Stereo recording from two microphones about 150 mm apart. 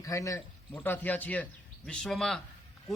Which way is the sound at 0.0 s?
20° left (ahead or behind).